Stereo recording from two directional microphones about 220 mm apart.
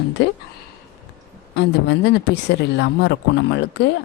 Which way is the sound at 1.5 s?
50° left (ahead or behind).